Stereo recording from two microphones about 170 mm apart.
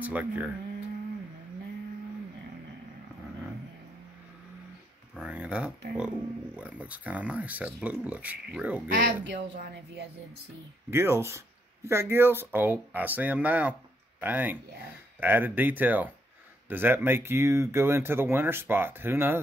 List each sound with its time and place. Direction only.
0.0 s speech: 10° right (ahead or behind)
5.2 s speech: 10° right (ahead or behind)
8.9 s speech: 90° right
10.9 s speech: 15° right (ahead or behind)